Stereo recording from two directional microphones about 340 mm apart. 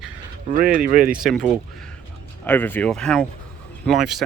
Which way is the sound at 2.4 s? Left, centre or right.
Centre.